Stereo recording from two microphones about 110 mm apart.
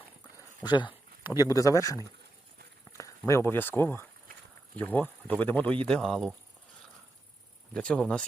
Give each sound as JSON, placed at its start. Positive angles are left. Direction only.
{"t": 0.3, "sound": "a sound", "side_deg": 40}
{"t": 1.4, "sound": "speech", "side_deg": 30}
{"t": 3.0, "sound": "speech", "side_deg": 25}
{"t": 7.7, "sound": "speech", "side_deg": 10}